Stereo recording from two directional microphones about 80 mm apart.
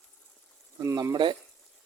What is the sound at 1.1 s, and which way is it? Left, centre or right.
Speech, right.